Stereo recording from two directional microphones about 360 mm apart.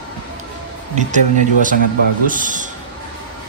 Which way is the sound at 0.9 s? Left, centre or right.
Right.